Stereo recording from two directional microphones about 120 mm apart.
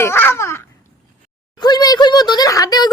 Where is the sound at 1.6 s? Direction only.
35° left (ahead or behind).